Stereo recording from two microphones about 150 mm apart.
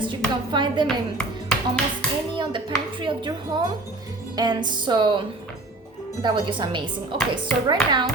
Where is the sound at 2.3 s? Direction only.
35° right (ahead or behind).